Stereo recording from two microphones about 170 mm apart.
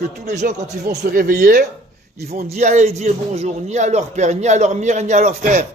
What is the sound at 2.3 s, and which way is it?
A man's voice, 40° right (ahead or behind).